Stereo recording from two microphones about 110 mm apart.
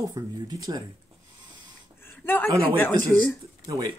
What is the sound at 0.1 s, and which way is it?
Speech, 35° right (ahead or behind).